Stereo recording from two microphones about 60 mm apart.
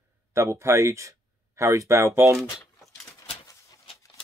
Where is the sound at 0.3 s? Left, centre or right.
Right.